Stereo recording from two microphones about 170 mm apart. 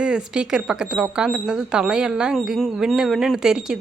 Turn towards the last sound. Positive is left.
turn(degrees=-5)  # may be behind; listen again after turning